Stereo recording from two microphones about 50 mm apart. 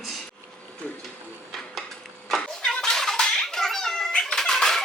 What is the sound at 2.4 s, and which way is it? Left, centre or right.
Cat, centre.